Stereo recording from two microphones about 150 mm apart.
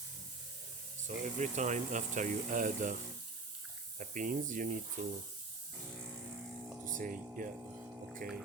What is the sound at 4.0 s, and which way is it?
Speech, 60° right (ahead or behind).